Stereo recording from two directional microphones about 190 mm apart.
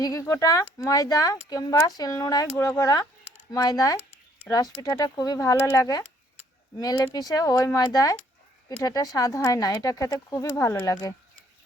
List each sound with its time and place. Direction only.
0.0 s speech: 20° left (ahead or behind)